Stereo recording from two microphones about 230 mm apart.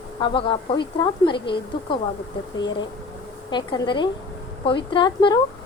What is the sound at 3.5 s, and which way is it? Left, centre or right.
A woman's voice, centre.